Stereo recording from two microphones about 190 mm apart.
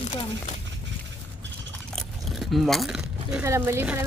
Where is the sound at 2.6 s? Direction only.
Centre (ahead or behind).